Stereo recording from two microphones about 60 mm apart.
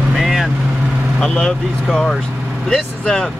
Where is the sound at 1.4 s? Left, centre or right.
Centre.